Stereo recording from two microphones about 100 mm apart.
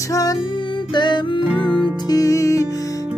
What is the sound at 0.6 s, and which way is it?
Music, 55° left (ahead or behind).